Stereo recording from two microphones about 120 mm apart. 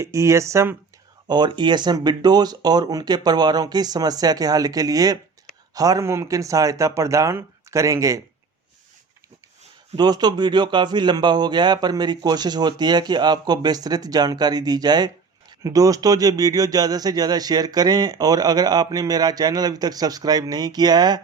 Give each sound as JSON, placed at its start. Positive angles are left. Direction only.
{"t": 0.0, "sound": "speech", "side_deg": -25}
{"t": 1.3, "sound": "speech", "side_deg": -40}
{"t": 10.0, "sound": "speech", "side_deg": -35}